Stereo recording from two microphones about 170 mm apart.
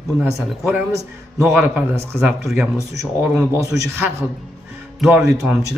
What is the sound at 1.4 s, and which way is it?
A man's voice, 5° right (ahead or behind).